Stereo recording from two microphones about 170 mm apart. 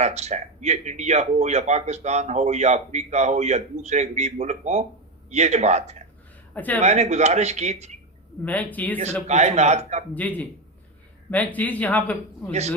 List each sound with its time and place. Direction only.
0.0 s speech: 40° right (ahead or behind)
6.5 s speech: 10° left (ahead or behind)
6.8 s speech: 40° right (ahead or behind)
8.4 s speech: 10° left (ahead or behind)
9.2 s speech: 40° right (ahead or behind)
10.2 s speech: 10° left (ahead or behind)
12.5 s speech: 40° right (ahead or behind)